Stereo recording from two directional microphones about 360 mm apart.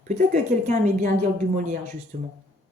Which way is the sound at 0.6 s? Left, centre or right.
Centre.